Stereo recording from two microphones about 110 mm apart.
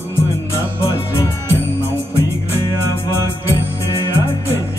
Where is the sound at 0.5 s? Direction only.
25° left (ahead or behind).